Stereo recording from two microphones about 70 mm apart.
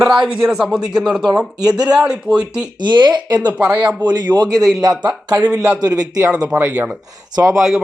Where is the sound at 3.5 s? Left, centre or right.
Centre.